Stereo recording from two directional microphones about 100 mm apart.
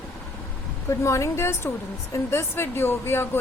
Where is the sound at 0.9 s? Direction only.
30° left (ahead or behind).